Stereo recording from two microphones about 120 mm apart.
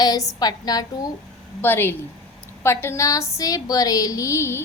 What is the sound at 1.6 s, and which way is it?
A woman's voice, 20° left (ahead or behind).